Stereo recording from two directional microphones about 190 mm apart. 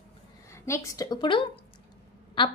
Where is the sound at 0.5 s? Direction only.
15° left (ahead or behind).